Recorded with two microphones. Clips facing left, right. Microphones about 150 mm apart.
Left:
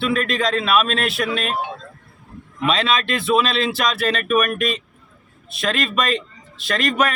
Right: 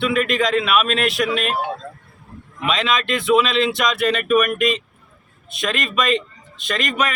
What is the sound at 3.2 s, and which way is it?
Speech, 35° left (ahead or behind).